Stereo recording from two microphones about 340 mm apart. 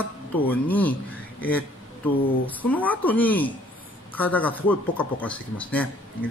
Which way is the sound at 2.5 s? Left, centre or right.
Centre.